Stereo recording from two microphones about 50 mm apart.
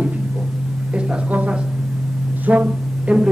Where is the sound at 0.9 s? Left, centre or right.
Right.